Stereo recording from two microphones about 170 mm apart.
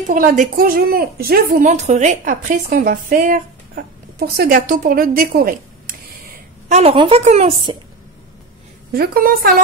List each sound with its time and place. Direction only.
0.1 s a woman's voice: 50° right (ahead or behind)
6.7 s speech: 35° right (ahead or behind)
8.9 s a woman's voice: 65° right (ahead or behind)